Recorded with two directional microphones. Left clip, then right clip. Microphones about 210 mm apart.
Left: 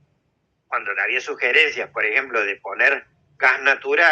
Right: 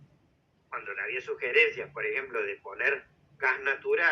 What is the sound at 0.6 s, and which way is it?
A man's voice, 40° left (ahead or behind).